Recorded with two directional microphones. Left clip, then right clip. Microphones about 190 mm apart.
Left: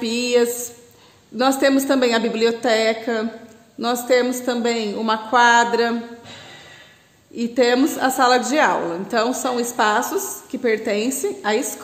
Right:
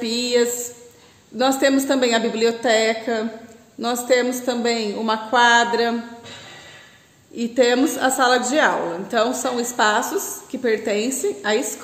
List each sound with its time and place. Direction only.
0.0 s music: 25° left (ahead or behind)
1.3 s a woman's voice: 25° left (ahead or behind)
7.3 s a woman's voice: 25° left (ahead or behind)